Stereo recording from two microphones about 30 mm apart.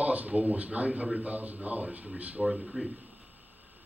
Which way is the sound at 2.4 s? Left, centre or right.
Centre.